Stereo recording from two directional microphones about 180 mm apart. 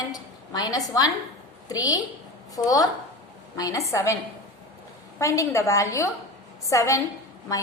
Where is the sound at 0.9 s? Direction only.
20° left (ahead or behind).